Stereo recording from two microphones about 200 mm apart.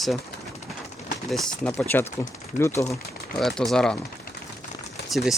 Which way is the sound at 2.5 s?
35° left (ahead or behind).